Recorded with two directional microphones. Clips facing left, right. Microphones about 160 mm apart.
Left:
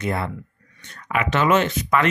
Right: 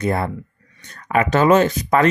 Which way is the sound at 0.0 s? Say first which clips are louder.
Right 4 dB; 45° right (ahead or behind).